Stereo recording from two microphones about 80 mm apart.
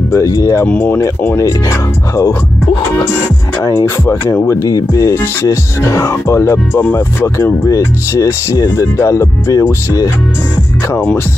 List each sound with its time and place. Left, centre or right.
0.1 s speech: left
0.7 s speech: left
3.8 s speech: left
6.8 s speech: left
7.6 s speech: left